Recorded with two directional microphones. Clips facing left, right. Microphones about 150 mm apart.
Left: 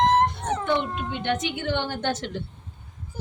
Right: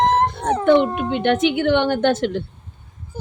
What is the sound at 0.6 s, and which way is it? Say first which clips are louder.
Speech: right 12 dB; 60° right (ahead or behind).